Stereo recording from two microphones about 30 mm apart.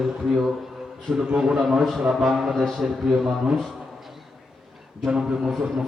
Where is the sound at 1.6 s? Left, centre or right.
Centre.